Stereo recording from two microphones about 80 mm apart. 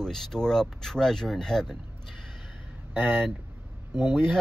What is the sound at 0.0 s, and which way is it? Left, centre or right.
Speech, centre.